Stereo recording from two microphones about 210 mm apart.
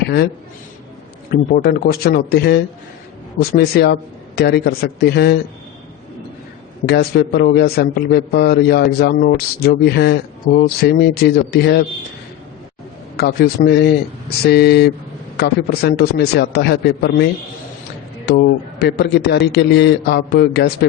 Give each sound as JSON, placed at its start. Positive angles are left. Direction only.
{"t": 1.3, "sound": "speech", "side_deg": 45}
{"t": 6.8, "sound": "speech", "side_deg": 50}
{"t": 13.1, "sound": "speech", "side_deg": 50}
{"t": 18.3, "sound": "speech", "side_deg": 50}